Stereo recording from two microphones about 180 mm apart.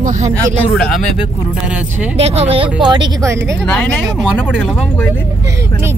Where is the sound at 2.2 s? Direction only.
35° right (ahead or behind).